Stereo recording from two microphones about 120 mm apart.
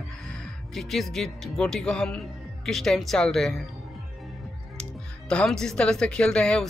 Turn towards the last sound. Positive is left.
turn(degrees=10)  # may be behind; listen again after turning